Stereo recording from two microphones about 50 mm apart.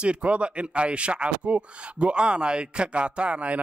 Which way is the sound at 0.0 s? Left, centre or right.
Right.